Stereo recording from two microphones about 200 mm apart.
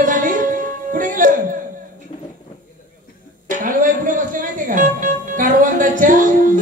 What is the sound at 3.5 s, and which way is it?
Music, 40° right (ahead or behind).